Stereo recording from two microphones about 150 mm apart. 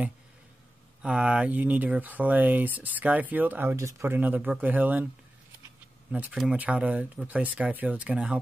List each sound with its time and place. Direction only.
1.0 s speech: 5° right (ahead or behind)
6.1 s speech: 5° right (ahead or behind)